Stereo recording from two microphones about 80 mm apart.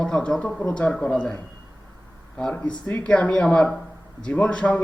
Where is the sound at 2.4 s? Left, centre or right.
Centre.